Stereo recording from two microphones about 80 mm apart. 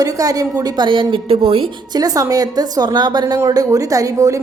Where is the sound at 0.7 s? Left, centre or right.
Right.